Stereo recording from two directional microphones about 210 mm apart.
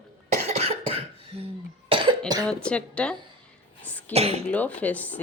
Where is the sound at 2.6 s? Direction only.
5° left (ahead or behind).